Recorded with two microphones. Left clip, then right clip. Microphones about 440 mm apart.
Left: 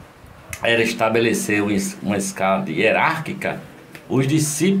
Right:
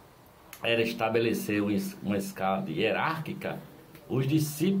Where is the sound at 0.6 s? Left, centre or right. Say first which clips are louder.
Left 9 dB; right.